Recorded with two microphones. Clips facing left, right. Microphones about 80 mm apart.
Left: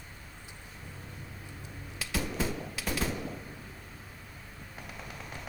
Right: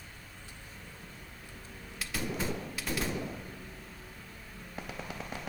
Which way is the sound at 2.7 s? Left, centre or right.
Centre.